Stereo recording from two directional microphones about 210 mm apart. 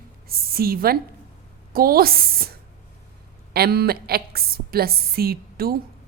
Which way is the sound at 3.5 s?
50° right (ahead or behind).